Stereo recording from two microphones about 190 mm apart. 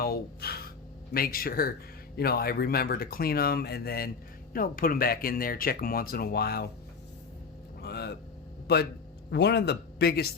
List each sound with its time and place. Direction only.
0.0 s speech: 55° left (ahead or behind)
7.8 s vehicle: 60° left (ahead or behind)
8.6 s speech: 60° left (ahead or behind)